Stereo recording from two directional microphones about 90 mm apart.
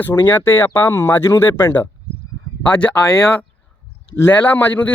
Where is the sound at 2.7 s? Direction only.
15° left (ahead or behind).